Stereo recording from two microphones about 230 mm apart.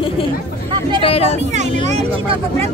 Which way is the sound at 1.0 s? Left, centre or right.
Left.